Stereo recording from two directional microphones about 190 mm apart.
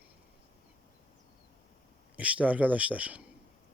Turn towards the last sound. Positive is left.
turn(degrees=-5)  # may be behind; listen again after turning